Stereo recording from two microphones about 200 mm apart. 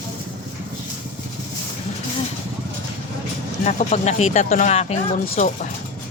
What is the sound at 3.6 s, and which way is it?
Speech, 35° left (ahead or behind).